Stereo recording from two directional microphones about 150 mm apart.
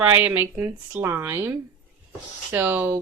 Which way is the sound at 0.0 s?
10° right (ahead or behind).